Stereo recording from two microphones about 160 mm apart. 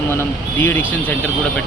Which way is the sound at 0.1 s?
15° left (ahead or behind).